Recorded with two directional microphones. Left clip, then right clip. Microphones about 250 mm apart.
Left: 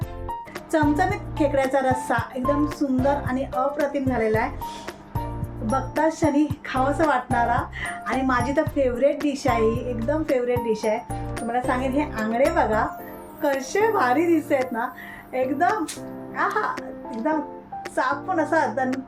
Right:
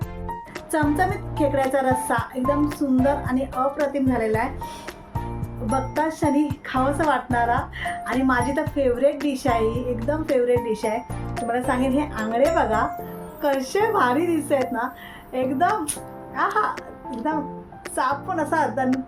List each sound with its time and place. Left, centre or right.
0.7 s a woman's voice: centre
5.7 s a woman's voice: centre